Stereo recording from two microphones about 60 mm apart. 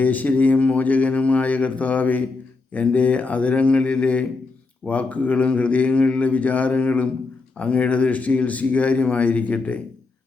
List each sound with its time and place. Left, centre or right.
0.0 s speech: left